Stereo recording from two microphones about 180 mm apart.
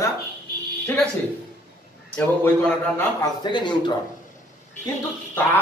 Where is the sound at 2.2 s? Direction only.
10° left (ahead or behind).